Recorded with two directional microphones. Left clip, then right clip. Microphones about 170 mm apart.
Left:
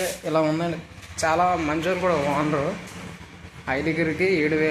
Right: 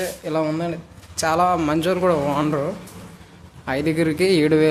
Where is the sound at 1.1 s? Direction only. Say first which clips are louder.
Right 2 dB; 35° right (ahead or behind); by 2.1 s 55° right (ahead or behind).